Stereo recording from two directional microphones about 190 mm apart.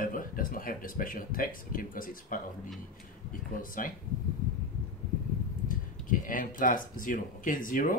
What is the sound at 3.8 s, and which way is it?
Speech, 45° left (ahead or behind).